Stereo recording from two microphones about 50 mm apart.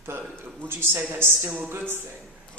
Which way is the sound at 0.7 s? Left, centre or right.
Right.